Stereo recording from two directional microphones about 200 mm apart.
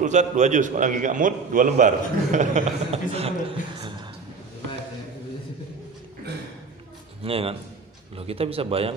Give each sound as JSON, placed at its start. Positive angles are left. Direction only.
{"t": 0.0, "sound": "a man's voice", "side_deg": -35}
{"t": 7.2, "sound": "speech", "side_deg": -30}